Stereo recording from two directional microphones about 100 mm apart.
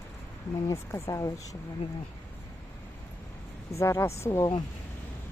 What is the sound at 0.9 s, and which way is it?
Speech, 35° left (ahead or behind).